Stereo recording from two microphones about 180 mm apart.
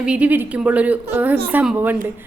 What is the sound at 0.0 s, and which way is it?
A woman's voice, 5° right (ahead or behind).